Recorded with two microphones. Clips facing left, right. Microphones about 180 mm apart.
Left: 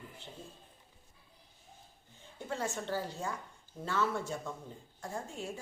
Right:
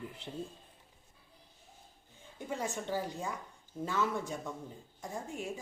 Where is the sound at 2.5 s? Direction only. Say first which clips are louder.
Even; 15° right (ahead or behind).